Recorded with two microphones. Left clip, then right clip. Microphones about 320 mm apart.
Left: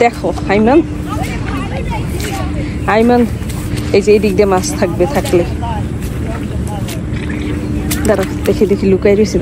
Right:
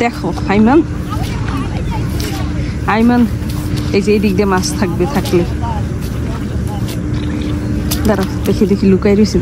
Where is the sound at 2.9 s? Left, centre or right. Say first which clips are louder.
Left 3 dB; centre.